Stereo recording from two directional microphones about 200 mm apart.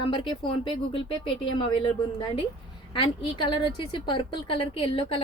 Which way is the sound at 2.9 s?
25° left (ahead or behind).